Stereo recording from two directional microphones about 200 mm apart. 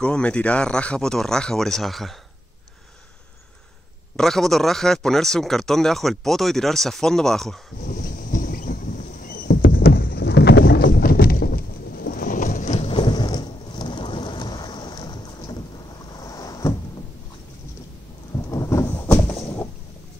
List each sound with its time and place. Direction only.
0.0 s speech: 5° left (ahead or behind)
4.2 s speech: centre (ahead or behind)
7.8 s a sound: 45° left (ahead or behind)
12.9 s thunder: 20° left (ahead or behind)
16.1 s boat: 20° left (ahead or behind)
18.3 s a sound: 15° left (ahead or behind)